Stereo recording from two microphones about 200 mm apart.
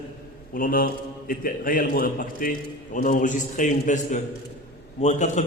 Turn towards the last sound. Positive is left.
turn(degrees=35)  # may be behind; listen again after turning